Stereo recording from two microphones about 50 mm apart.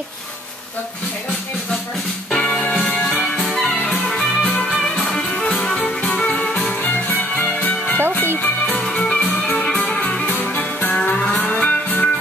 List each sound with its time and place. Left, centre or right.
2.3 s music: left
3.0 s music: centre
5.3 s music: left
5.6 s music: centre
6.8 s music: left
8.9 s music: left
10.5 s music: left